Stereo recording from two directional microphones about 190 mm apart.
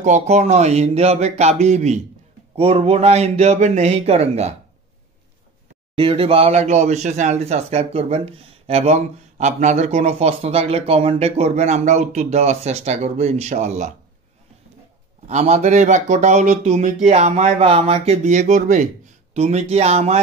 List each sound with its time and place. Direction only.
0.0 s speech: 40° right (ahead or behind)
5.9 s speech: 30° right (ahead or behind)
15.2 s speech: 35° right (ahead or behind)